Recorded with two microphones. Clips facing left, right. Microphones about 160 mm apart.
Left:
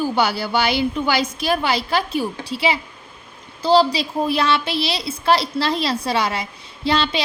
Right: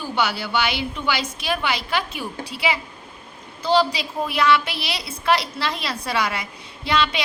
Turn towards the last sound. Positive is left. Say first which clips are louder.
# left 2 dB
turn(degrees=30)  # may be behind; listen again after turning